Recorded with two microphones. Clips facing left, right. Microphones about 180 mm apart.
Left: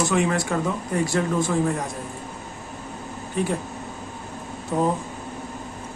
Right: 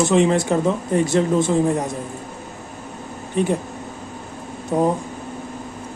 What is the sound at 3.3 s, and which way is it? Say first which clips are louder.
Speech: right 5 dB; 20° right (ahead or behind).